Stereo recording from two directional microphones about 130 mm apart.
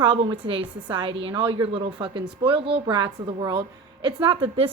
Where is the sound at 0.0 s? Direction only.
40° right (ahead or behind).